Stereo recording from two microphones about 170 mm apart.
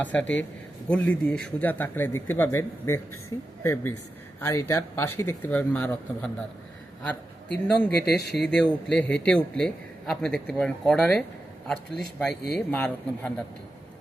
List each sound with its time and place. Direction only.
0.0 s a man's voice: 10° left (ahead or behind)
7.9 s speech: 70° left (ahead or behind)
8.4 s a man's voice: 5° left (ahead or behind)
12.3 s speech: 70° left (ahead or behind)
12.5 s a man's voice: 10° left (ahead or behind)